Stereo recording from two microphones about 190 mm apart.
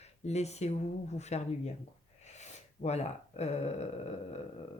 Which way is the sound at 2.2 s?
35° left (ahead or behind).